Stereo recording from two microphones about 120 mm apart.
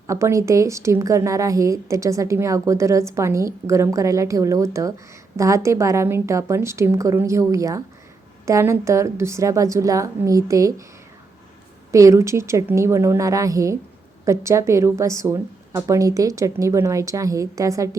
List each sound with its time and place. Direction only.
0.1 s a woman's voice: 25° right (ahead or behind)
11.9 s a woman's voice: 25° right (ahead or behind)